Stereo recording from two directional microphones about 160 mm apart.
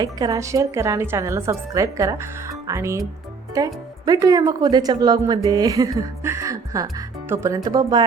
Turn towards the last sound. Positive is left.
turn(degrees=-25)  # may be behind; listen again after turning